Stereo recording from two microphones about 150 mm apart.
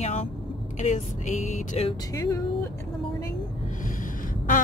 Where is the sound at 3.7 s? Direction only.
60° left (ahead or behind).